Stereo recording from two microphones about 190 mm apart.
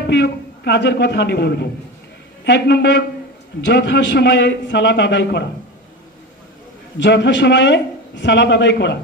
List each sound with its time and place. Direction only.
0.0 s a man's voice: 65° left (ahead or behind)
7.0 s speech: 70° left (ahead or behind)